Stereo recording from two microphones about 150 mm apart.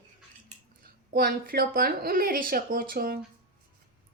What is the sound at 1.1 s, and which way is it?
Speech, 80° right.